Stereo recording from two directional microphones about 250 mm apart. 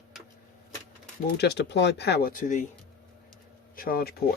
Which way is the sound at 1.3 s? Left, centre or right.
Left.